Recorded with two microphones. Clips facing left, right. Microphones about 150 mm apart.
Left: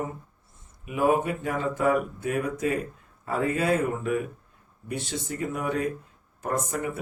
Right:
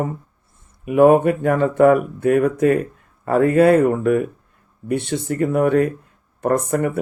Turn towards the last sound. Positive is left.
turn(degrees=-60)  # may be behind; listen again after turning